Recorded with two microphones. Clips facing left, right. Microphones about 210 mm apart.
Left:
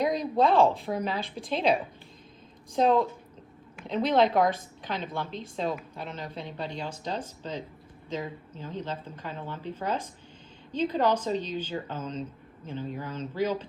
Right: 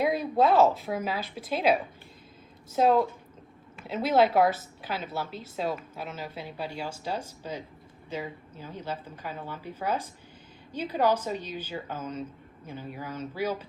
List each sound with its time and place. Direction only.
0.0 s a woman's voice: 5° right (ahead or behind)
2.7 s a woman's voice: 5° right (ahead or behind)